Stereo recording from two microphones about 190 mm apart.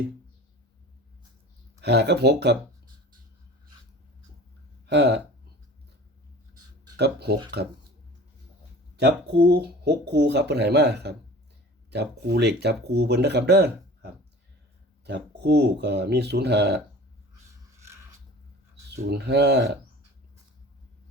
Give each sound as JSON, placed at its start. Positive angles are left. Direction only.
{"t": 1.8, "sound": "speech", "side_deg": -60}
{"t": 4.9, "sound": "speech", "side_deg": -65}
{"t": 6.9, "sound": "speech", "side_deg": -60}
{"t": 9.0, "sound": "speech", "side_deg": -60}
{"t": 17.7, "sound": "scissors", "side_deg": -15}
{"t": 18.9, "sound": "speech", "side_deg": -60}